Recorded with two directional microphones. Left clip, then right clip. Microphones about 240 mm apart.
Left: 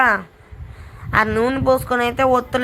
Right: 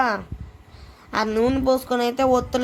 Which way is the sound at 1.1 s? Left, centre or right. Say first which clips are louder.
Left 4 dB; centre.